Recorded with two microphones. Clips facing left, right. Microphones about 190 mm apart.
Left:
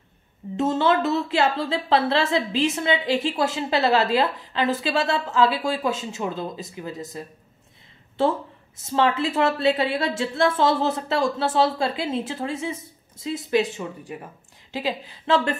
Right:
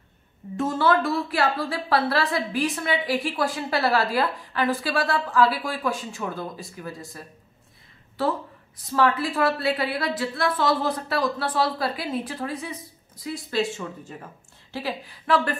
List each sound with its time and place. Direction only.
0.6 s speech: 20° left (ahead or behind)